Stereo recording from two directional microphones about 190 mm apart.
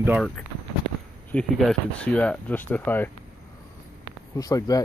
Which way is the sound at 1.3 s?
5° left (ahead or behind).